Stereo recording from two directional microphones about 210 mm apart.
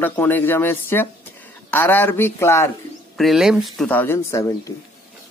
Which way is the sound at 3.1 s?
Centre (ahead or behind).